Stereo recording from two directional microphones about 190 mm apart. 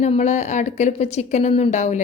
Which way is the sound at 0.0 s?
35° left (ahead or behind).